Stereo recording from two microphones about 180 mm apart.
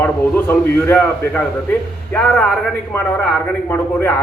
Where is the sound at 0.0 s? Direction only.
10° left (ahead or behind).